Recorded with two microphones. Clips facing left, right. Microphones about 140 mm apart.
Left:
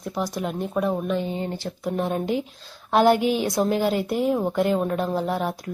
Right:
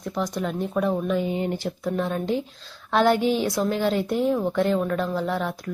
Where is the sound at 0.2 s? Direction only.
10° left (ahead or behind).